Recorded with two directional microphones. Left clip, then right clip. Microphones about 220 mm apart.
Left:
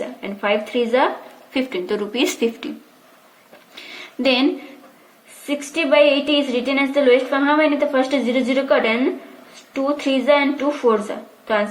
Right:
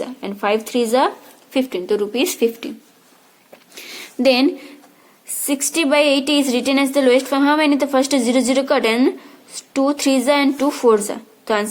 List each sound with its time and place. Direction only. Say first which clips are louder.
0.0 s speech: right 2 dB; 20° right (ahead or behind)
3.8 s a sound: right 3 dB; 20° right (ahead or behind)
5.5 s a woman's voice: right 1 dB; 25° right (ahead or behind)